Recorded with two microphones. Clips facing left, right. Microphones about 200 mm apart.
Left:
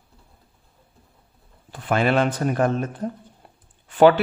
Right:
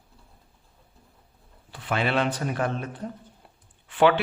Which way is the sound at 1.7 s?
50° left (ahead or behind).